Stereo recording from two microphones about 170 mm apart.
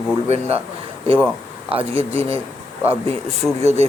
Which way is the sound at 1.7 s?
35° right (ahead or behind).